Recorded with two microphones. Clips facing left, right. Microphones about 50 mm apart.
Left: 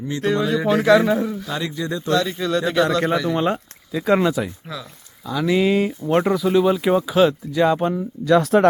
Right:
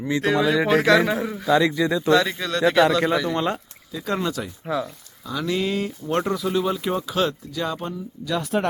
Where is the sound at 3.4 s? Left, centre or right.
Centre.